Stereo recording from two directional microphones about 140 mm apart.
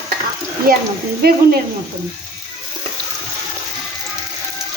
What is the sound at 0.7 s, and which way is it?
Speech, 90° right.